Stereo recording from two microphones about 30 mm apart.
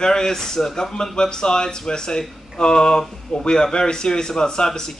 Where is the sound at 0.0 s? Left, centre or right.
Left.